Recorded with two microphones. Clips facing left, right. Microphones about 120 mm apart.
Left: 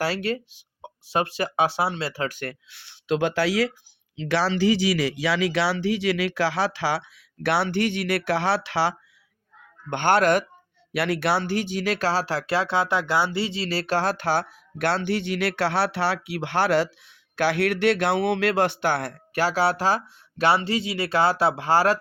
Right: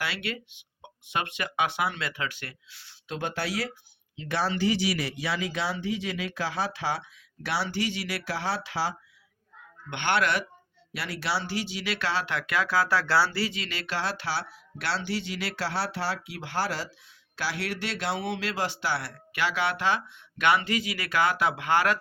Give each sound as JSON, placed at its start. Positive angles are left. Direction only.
{"t": 0.0, "sound": "speech", "side_deg": 40}
{"t": 7.4, "sound": "speech", "side_deg": 60}
{"t": 9.9, "sound": "speech", "side_deg": 45}
{"t": 10.9, "sound": "speech", "side_deg": 60}